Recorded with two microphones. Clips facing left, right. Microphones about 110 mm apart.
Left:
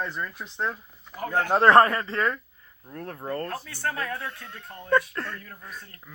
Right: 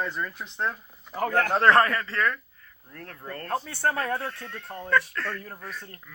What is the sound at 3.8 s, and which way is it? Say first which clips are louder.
Speech: right 3 dB; 35° right (ahead or behind).